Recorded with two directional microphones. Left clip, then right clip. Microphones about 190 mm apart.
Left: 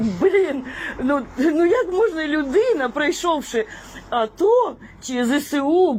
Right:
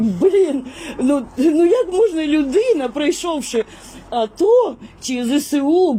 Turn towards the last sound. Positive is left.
turn(degrees=-30)  # may be behind; listen again after turning